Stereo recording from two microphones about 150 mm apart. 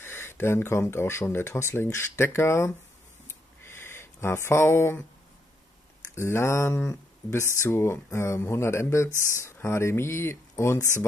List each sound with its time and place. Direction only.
0.0 s speech: 15° left (ahead or behind)
3.3 s a sound: 15° left (ahead or behind)
6.1 s speech: 15° left (ahead or behind)